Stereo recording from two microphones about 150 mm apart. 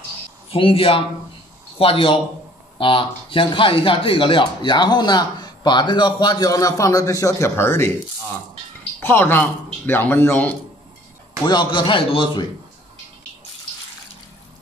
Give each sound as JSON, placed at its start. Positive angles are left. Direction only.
{"t": 0.5, "sound": "a man's voice", "side_deg": 35}
{"t": 9.0, "sound": "speech", "side_deg": 15}
{"t": 11.4, "sound": "a man's voice", "side_deg": 30}